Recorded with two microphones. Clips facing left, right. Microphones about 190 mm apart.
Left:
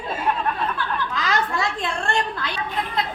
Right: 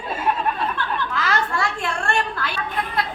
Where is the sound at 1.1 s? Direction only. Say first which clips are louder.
Even; 15° left (ahead or behind).